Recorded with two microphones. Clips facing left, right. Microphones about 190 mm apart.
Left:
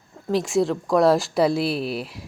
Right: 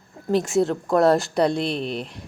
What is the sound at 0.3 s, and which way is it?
A woman's voice, centre (ahead or behind).